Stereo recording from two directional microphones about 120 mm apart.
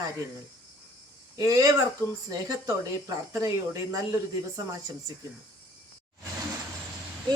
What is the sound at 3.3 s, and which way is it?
Speech, 25° right (ahead or behind).